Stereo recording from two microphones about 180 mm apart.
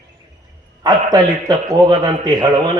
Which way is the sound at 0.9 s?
25° right (ahead or behind).